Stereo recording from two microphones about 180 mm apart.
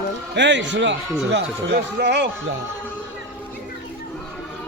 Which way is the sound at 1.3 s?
65° right (ahead or behind).